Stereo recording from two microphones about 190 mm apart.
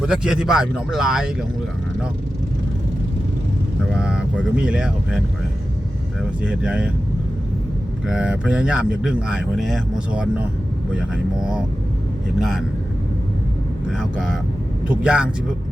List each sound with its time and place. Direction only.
0.0 s speech: 5° right (ahead or behind)
3.9 s speech: 5° right (ahead or behind)
6.4 s speech: 5° right (ahead or behind)
8.0 s speech: 5° right (ahead or behind)
13.9 s speech: centre (ahead or behind)